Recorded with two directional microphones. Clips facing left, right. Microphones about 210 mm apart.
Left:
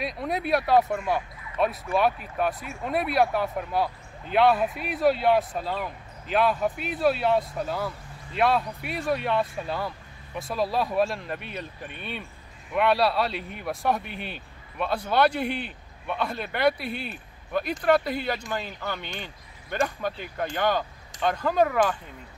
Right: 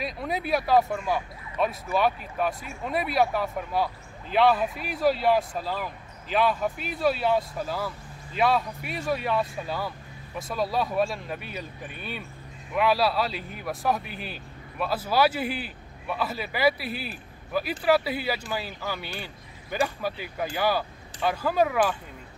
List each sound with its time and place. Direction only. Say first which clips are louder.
0.0 s speech: left 1 dB; centre (ahead or behind)